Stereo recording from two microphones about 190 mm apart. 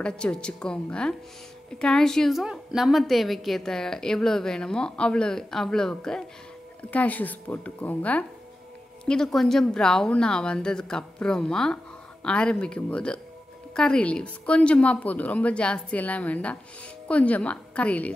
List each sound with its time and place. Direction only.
0.0 s a woman's voice: 5° left (ahead or behind)